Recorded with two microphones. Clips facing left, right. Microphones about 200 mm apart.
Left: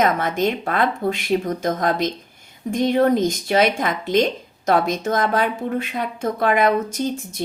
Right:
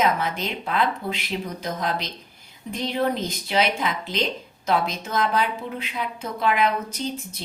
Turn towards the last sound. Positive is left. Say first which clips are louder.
# left 5 dB
turn(degrees=50)  # may be behind; listen again after turning